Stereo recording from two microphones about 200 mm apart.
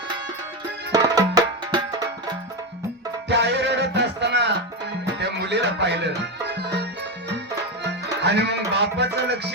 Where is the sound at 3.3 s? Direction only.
60° right (ahead or behind).